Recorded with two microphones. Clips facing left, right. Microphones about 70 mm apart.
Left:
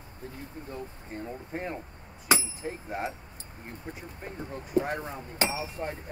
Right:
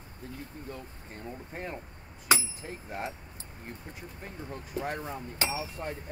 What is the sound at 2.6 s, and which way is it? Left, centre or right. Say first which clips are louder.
Speech: left 4 dB; centre.